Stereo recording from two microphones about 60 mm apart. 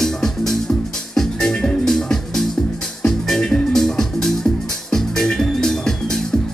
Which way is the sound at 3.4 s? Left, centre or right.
Centre.